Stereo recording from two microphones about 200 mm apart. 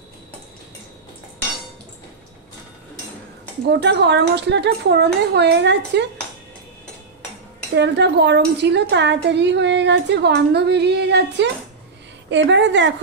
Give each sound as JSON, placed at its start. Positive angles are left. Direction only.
{"t": 3.6, "sound": "a woman's voice", "side_deg": -60}
{"t": 7.7, "sound": "a woman's voice", "side_deg": -60}